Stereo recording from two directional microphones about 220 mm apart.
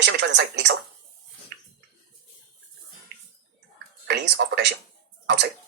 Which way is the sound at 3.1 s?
50° right (ahead or behind).